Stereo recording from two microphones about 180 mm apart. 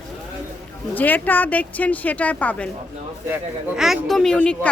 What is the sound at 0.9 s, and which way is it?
A woman's voice, 10° left (ahead or behind).